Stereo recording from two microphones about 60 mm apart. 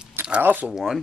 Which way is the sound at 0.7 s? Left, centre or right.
Centre.